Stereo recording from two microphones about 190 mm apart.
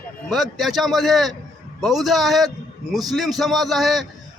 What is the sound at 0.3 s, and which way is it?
A man's voice, centre (ahead or behind).